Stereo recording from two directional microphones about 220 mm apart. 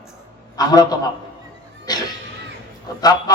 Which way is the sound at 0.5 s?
15° left (ahead or behind).